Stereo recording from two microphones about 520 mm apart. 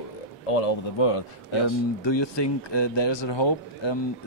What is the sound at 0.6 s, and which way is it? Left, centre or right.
Speech, left.